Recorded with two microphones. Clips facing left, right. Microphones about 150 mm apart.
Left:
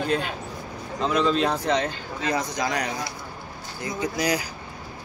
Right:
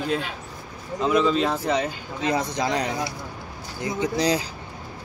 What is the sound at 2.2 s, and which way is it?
Speech, 25° right (ahead or behind).